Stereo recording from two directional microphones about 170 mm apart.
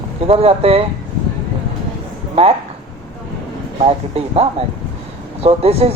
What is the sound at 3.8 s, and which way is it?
Speech, 35° right (ahead or behind).